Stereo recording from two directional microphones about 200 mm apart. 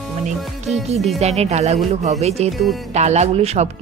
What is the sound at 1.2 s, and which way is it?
Speech, 30° right (ahead or behind).